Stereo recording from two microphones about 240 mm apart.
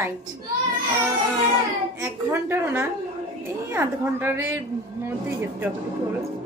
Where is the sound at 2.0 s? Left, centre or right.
Centre.